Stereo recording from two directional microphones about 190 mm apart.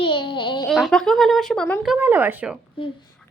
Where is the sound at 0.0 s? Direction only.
25° left (ahead or behind).